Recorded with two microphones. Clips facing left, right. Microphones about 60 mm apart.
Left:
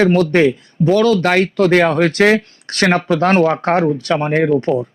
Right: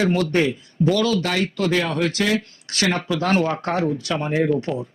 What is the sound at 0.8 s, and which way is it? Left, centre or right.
Speech, left.